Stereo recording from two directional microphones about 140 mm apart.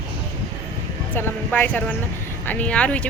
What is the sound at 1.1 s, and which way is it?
Speech, 10° left (ahead or behind).